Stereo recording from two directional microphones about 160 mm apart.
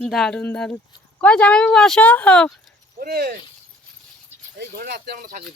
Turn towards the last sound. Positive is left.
turn(degrees=-60)  # may be behind; listen again after turning